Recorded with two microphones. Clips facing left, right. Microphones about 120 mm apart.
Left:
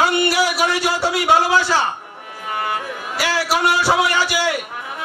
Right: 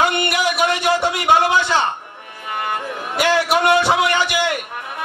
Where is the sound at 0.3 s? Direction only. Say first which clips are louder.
Even; 20° right (ahead or behind).